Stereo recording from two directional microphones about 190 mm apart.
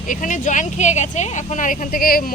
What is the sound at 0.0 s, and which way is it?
Speech, 45° left (ahead or behind).